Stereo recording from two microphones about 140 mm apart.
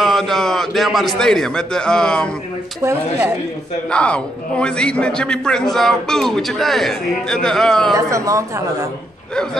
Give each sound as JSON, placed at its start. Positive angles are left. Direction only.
{"t": 0.0, "sound": "a man's voice", "side_deg": 0}
{"t": 2.8, "sound": "a man's voice", "side_deg": -20}
{"t": 3.9, "sound": "a man's voice", "side_deg": 10}
{"t": 7.9, "sound": "a man's voice", "side_deg": -20}
{"t": 9.3, "sound": "a man's voice", "side_deg": 5}